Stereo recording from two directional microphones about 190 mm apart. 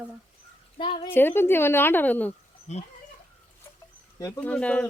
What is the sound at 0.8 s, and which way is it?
Speech, 30° left (ahead or behind).